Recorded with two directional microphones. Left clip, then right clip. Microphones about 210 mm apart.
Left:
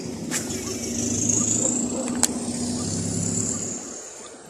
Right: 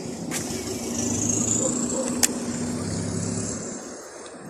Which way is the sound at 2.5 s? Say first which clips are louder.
Left 1 dB; 40° left (ahead or behind).